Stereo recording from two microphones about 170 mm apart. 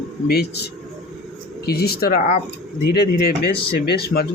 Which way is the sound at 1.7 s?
65° left (ahead or behind).